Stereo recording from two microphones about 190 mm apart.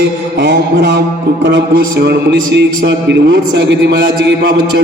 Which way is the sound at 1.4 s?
60° right (ahead or behind).